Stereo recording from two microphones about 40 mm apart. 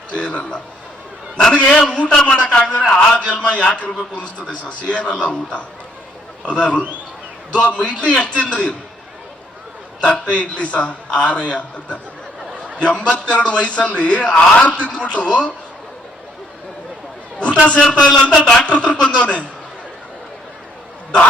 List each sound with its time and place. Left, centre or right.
0.1 s a man's voice: left
10.0 s a man's voice: left
17.4 s a man's voice: left